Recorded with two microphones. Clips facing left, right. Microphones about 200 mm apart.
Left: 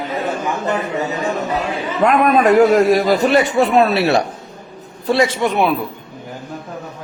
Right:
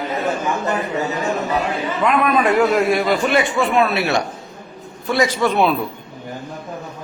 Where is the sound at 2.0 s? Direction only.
45° left (ahead or behind); by 5.8 s 15° left (ahead or behind).